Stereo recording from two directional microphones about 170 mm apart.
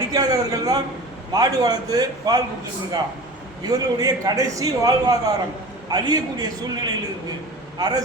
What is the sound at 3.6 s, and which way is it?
A man's voice, 20° right (ahead or behind).